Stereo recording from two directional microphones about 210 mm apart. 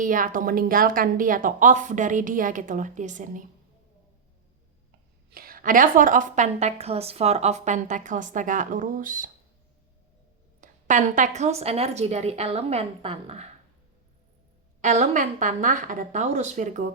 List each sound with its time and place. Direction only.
0.0 s a woman's voice: 40° right (ahead or behind)
5.3 s a woman's voice: 45° right (ahead or behind)
10.6 s a woman's voice: 35° right (ahead or behind)
14.8 s a woman's voice: 35° right (ahead or behind)